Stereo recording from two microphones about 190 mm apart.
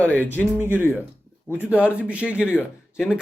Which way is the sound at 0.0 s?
10° left (ahead or behind).